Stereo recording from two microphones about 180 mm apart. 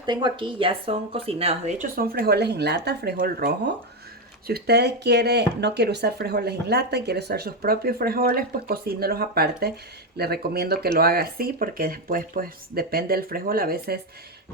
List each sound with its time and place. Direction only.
0.0 s a woman's voice: 25° right (ahead or behind)
1.8 s speech: 55° right (ahead or behind)